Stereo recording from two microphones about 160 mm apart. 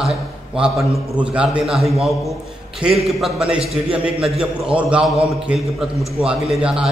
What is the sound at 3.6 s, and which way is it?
Speech, 35° right (ahead or behind).